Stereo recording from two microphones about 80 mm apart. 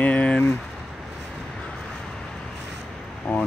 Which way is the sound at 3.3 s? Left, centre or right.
Centre.